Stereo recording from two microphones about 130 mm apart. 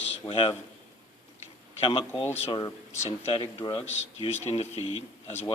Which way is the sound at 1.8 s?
40° left (ahead or behind).